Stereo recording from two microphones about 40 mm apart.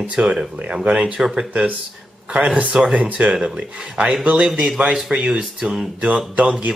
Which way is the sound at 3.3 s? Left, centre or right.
Centre.